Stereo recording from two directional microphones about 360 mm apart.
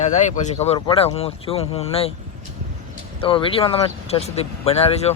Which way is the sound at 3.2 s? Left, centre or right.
Centre.